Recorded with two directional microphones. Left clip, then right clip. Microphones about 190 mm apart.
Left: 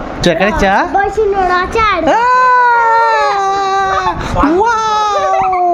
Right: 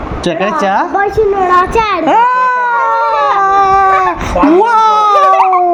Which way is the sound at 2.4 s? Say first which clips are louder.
Left 2 dB; 25° left (ahead or behind).